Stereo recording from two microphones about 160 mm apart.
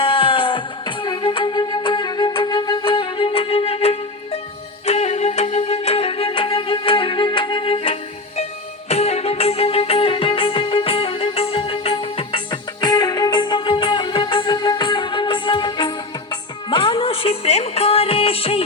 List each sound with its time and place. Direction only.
0.0 s music: 35° left (ahead or behind)